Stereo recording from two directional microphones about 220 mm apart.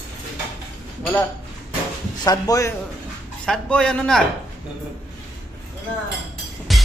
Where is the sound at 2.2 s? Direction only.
15° left (ahead or behind).